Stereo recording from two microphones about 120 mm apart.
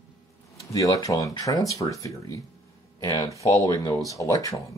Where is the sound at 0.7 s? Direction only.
30° left (ahead or behind).